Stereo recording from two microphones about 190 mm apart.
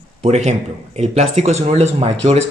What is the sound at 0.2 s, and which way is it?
Speech, 35° right (ahead or behind).